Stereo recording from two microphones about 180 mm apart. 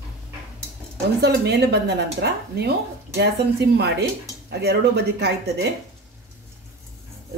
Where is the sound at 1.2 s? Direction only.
65° right (ahead or behind).